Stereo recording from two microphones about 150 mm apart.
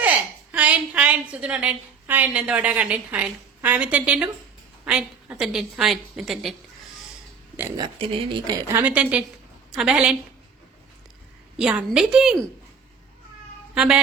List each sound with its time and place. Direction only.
0.0 s a woman's voice: 10° right (ahead or behind)
7.8 s speech: 35° right (ahead or behind)
8.7 s a woman's voice: 10° right (ahead or behind)
11.5 s a woman's voice: 5° right (ahead or behind)
13.7 s a woman's voice: 5° right (ahead or behind)